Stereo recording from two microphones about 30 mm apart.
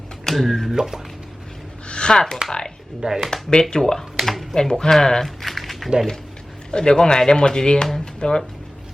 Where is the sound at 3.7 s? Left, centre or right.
Centre.